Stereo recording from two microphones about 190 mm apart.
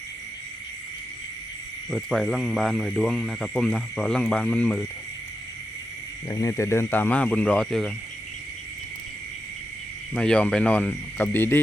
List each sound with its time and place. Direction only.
1.9 s speech: centre (ahead or behind)
6.2 s speech: 20° left (ahead or behind); by 7.9 s centre (ahead or behind)
10.2 s speech: 5° left (ahead or behind)